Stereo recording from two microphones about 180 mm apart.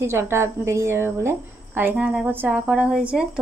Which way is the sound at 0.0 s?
15° right (ahead or behind).